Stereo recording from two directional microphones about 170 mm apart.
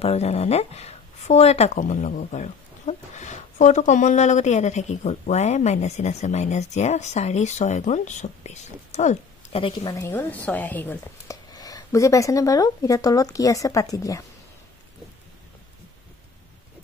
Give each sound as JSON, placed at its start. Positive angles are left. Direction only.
{"t": 0.0, "sound": "speech", "side_deg": 40}
{"t": 9.9, "sound": "speech", "side_deg": 15}
{"t": 11.5, "sound": "speech", "side_deg": 20}